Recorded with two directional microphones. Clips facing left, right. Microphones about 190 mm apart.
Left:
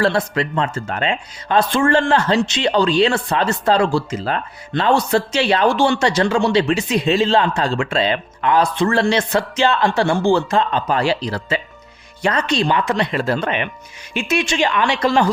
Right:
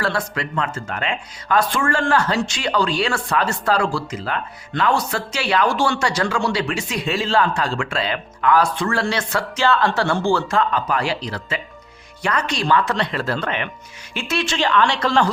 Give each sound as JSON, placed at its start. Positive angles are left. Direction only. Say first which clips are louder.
{"t": 0.0, "sound": "speech", "louder": "left 6 dB", "side_deg": 25}